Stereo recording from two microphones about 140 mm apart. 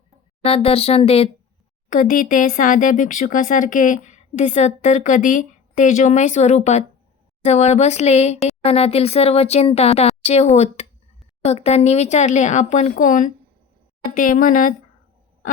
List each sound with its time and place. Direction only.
0.4 s speech: 45° left (ahead or behind)
1.9 s speech: 75° left (ahead or behind)
14.1 s speech: 80° left